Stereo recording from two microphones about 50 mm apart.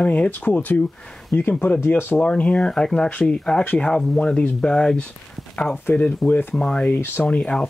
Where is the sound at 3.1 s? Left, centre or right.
Left.